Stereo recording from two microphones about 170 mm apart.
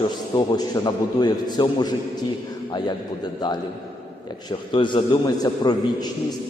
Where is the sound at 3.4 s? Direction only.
25° left (ahead or behind).